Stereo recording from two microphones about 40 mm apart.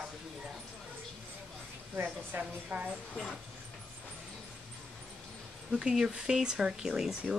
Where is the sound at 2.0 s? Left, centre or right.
Right.